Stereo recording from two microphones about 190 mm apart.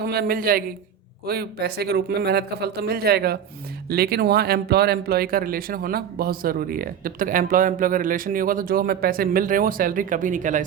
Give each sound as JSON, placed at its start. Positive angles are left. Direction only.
{"t": 0.0, "sound": "speech", "side_deg": -55}